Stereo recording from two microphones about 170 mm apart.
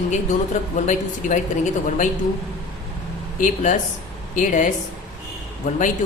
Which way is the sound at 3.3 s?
50° left (ahead or behind).